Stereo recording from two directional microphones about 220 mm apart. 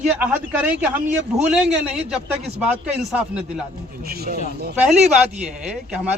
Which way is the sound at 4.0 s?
45° right (ahead or behind).